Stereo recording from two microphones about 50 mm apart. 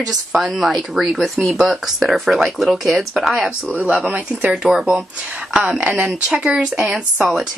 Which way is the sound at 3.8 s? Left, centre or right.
Right.